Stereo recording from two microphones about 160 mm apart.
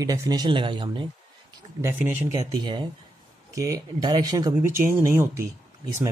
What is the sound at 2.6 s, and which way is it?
Speech, 30° right (ahead or behind).